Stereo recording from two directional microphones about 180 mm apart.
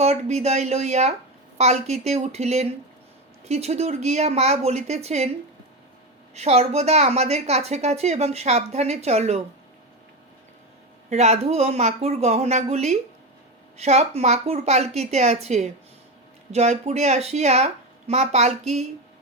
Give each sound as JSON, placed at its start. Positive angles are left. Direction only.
{"t": 0.0, "sound": "a woman's voice", "side_deg": -35}
{"t": 6.3, "sound": "a woman's voice", "side_deg": -35}
{"t": 11.1, "sound": "a woman's voice", "side_deg": -35}